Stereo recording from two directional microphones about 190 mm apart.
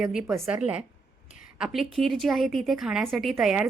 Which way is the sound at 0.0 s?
5° right (ahead or behind).